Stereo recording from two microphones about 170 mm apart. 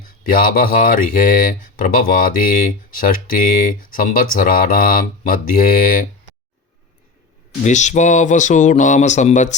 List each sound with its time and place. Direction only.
0.3 s speech: 55° left (ahead or behind)
7.6 s speech: 45° left (ahead or behind)